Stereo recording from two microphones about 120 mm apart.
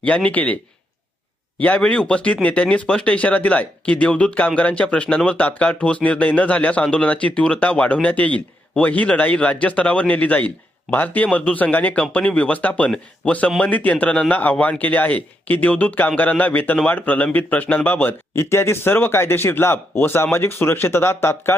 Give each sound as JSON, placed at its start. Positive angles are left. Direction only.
{"t": 0.0, "sound": "a man's voice", "side_deg": 10}